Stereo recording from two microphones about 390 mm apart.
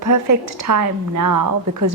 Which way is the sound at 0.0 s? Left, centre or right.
Right.